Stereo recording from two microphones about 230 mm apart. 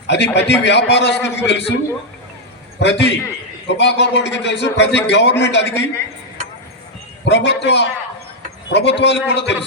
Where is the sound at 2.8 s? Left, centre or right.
Left.